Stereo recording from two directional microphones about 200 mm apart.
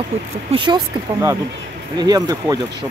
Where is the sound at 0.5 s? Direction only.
20° right (ahead or behind).